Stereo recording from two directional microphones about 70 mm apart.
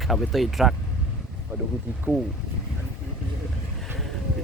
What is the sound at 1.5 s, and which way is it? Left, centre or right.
Speech, centre.